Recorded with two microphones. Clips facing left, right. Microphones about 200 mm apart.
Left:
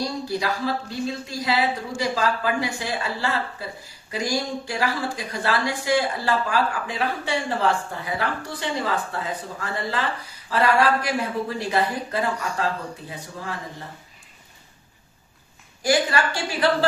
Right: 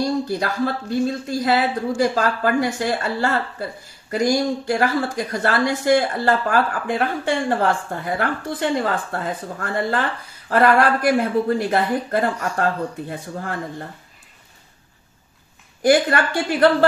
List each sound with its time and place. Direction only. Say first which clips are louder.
0.4 s speech: right 3 dB; 50° right (ahead or behind)
15.8 s a woman's voice: right 5 dB; 55° right (ahead or behind)